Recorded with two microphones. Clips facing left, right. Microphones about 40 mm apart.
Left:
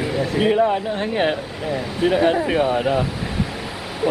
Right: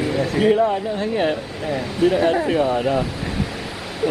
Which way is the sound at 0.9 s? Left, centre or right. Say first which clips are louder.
Even; left.